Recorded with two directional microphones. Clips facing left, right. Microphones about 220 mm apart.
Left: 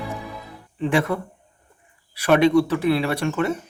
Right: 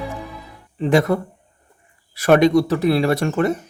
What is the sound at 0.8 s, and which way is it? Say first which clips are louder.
A man's voice: right 5 dB; 40° right (ahead or behind).